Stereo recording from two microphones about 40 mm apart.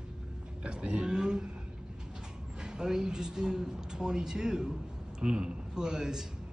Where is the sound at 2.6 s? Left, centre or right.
Centre.